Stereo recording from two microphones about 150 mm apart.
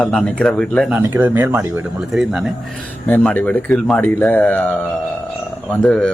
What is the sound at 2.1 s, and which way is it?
Speech, centre (ahead or behind).